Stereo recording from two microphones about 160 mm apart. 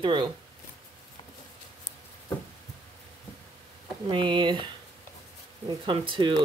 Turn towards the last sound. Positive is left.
turn(degrees=-30)  # may be behind; listen again after turning